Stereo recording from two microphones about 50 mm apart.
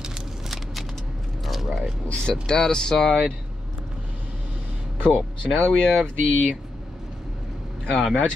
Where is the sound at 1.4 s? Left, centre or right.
Centre.